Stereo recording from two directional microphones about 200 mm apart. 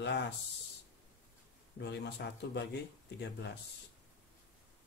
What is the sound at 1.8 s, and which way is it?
Speech, 55° left (ahead or behind).